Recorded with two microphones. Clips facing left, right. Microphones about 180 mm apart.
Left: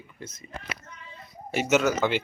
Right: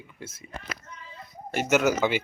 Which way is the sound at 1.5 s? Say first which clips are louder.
Even; 5° right (ahead or behind).